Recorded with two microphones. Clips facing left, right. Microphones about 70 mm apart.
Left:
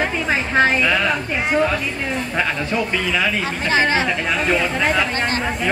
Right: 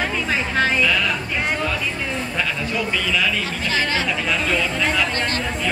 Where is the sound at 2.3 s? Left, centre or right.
Left.